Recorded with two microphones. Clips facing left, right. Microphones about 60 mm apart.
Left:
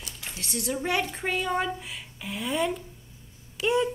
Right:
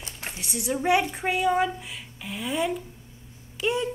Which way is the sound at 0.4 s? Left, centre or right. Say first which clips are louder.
Right 2 dB; centre.